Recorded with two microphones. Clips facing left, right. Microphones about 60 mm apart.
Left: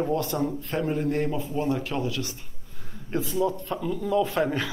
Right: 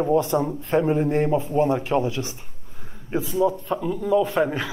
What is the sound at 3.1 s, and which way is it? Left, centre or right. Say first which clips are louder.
A man's voice: right 4 dB; centre.